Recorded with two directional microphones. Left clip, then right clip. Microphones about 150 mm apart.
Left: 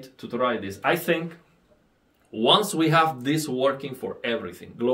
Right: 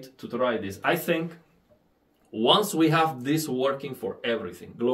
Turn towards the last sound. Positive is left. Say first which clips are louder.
# left 1 dB
turn(degrees=30)  # may be behind; listen again after turning